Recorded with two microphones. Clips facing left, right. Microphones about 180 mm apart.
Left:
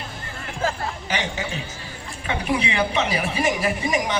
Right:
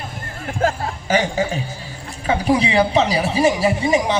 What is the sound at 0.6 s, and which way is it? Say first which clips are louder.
Music: right 5 dB; 45° right (ahead or behind).